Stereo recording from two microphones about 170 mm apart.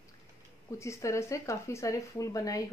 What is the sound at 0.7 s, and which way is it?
Speech, 15° left (ahead or behind).